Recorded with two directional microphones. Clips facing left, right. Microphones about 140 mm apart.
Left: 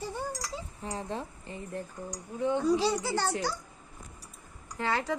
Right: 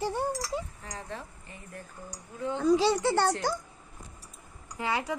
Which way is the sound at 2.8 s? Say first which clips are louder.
Right 4 dB; 80° right.